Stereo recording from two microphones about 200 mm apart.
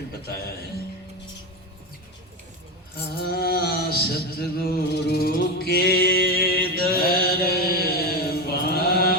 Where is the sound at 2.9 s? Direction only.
50° left (ahead or behind).